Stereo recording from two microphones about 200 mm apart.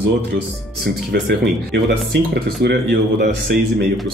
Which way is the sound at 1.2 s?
55° right (ahead or behind).